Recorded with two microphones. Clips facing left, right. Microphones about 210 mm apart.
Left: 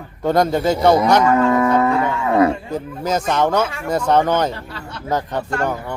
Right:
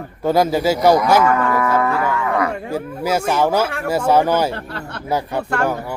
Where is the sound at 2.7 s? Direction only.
10° right (ahead or behind).